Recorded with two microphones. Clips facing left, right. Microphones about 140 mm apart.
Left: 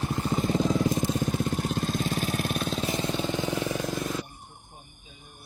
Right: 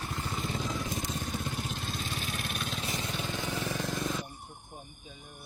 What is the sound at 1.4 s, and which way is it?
Vehicle, 50° left (ahead or behind).